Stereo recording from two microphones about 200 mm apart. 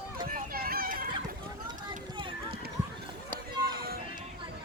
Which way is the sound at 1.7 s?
20° right (ahead or behind).